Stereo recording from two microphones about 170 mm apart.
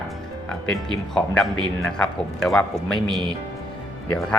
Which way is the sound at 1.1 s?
5° left (ahead or behind).